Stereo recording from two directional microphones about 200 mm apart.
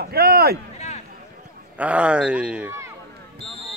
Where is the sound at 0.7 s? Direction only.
35° left (ahead or behind).